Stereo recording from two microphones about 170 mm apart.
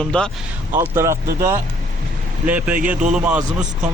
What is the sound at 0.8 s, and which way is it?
Speech, 15° right (ahead or behind).